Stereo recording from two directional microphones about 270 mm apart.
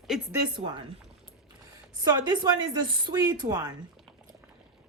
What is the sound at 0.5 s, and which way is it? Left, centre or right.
Speech, centre.